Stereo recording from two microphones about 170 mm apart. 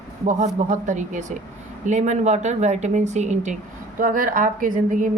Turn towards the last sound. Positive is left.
turn(degrees=-50)  # may be behind; listen again after turning